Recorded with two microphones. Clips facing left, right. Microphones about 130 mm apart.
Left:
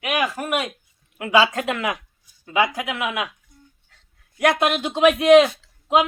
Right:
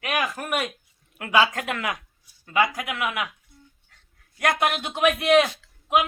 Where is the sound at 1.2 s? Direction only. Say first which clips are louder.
Left 3 dB; 25° left (ahead or behind).